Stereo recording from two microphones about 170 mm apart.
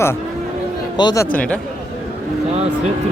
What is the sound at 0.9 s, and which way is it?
Speech, 20° left (ahead or behind).